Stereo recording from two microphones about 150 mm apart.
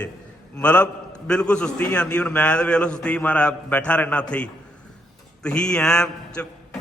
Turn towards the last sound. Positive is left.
turn(degrees=5)  # may be behind; listen again after turning